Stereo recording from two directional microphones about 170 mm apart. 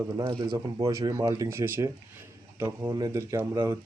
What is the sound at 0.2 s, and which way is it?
Speech, 25° right (ahead or behind).